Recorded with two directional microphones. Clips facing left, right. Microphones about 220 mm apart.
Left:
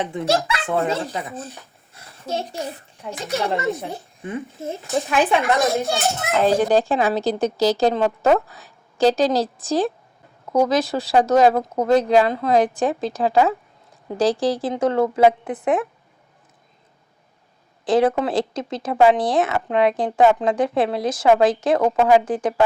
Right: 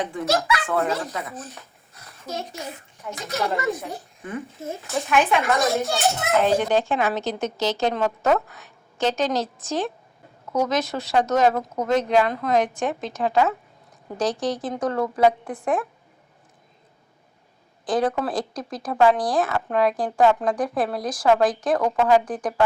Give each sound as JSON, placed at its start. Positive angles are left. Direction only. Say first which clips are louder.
{"t": 0.0, "sound": "speech", "louder": "left 2 dB", "side_deg": 25}
{"t": 6.4, "sound": "speech", "louder": "left 6 dB", "side_deg": 35}
{"t": 17.8, "sound": "speech", "louder": "left 5 dB", "side_deg": 25}